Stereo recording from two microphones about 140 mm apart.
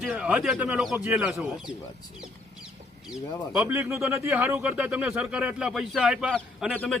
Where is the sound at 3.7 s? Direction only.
20° right (ahead or behind).